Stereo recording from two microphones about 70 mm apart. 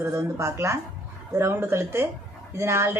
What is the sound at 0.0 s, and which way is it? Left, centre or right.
A woman's voice, right.